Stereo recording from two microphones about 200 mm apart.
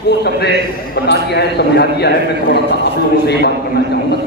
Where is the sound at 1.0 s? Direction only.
55° left (ahead or behind).